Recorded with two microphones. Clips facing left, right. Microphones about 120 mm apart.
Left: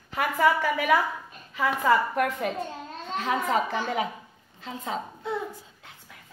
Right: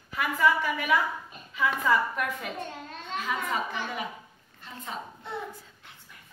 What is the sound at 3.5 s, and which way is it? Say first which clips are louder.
Speech: left 6 dB; 80° left.